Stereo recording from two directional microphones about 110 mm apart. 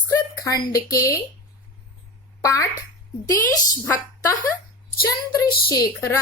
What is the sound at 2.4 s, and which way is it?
A woman's voice, 30° left (ahead or behind).